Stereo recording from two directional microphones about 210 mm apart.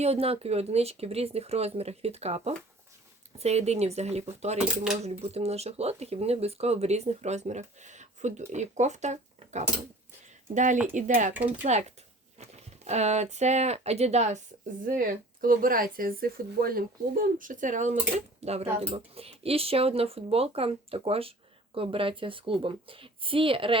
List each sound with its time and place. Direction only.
0.0 s speech: 30° right (ahead or behind)
12.4 s a sound: 30° right (ahead or behind)
13.3 s speech: 35° right (ahead or behind)